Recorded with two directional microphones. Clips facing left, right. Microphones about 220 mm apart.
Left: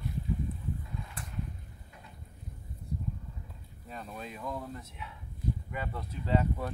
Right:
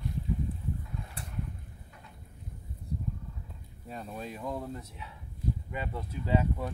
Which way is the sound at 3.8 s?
35° right (ahead or behind).